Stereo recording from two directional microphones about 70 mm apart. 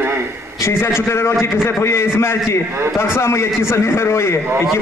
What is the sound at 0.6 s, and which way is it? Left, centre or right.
A man's voice, left.